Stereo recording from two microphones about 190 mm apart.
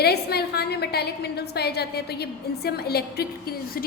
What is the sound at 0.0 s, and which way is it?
A woman's voice, 55° left (ahead or behind).